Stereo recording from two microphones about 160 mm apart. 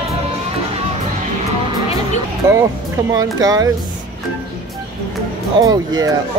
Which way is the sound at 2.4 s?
25° right (ahead or behind).